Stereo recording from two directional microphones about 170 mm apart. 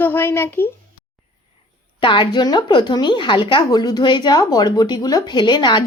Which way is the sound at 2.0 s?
30° left (ahead or behind).